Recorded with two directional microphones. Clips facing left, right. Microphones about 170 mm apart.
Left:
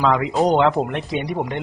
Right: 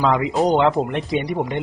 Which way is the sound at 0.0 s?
Centre (ahead or behind).